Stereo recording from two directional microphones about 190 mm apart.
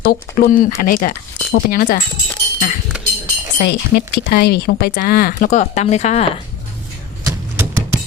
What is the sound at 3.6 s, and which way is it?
Speech, 60° left (ahead or behind).